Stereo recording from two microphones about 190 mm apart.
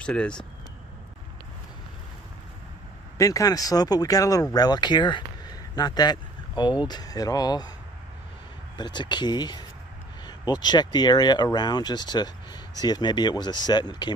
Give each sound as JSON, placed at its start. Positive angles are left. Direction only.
{"t": 0.0, "sound": "speech", "side_deg": 5}
{"t": 3.2, "sound": "speech", "side_deg": 20}
{"t": 8.7, "sound": "speech", "side_deg": 25}